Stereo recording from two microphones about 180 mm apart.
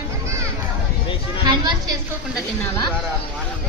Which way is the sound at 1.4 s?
25° right (ahead or behind).